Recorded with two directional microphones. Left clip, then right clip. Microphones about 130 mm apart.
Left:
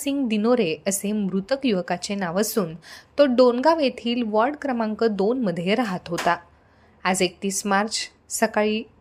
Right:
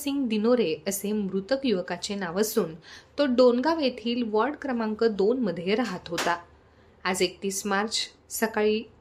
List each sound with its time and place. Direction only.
0.0 s a woman's voice: 35° left (ahead or behind)
1.1 s a woman's voice: 25° left (ahead or behind)
1.4 s a woman's voice: 35° left (ahead or behind)